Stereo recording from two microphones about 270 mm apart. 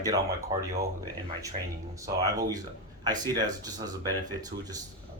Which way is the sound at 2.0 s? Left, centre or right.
Centre.